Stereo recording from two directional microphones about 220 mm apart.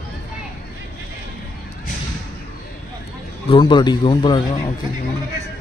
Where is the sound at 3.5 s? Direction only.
20° left (ahead or behind).